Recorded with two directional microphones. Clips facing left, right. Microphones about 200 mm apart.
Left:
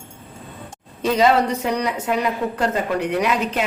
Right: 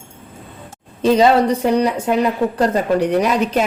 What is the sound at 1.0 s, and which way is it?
A woman's voice, 30° right (ahead or behind).